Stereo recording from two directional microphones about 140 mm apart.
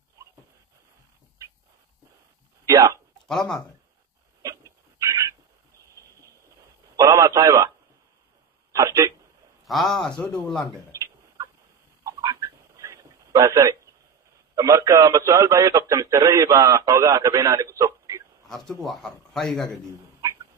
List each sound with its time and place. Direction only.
2.6 s speech: 20° right (ahead or behind)
3.3 s a man's voice: centre (ahead or behind)
4.4 s a sound: 25° right (ahead or behind)
7.0 s radio: 20° right (ahead or behind)
8.7 s speech: 20° right (ahead or behind)
9.7 s a man's voice: centre (ahead or behind)
10.9 s chicken: 25° right (ahead or behind)
12.0 s a sound: 25° right (ahead or behind)
14.5 s a man's voice: 25° right (ahead or behind)
18.5 s a man's voice: centre (ahead or behind)